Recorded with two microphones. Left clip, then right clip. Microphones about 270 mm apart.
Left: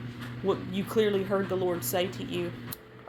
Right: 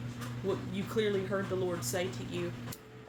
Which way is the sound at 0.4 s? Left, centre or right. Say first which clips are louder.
Left 6 dB; centre.